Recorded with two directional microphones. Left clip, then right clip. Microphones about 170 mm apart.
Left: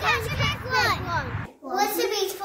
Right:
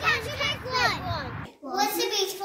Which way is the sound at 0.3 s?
15° left (ahead or behind).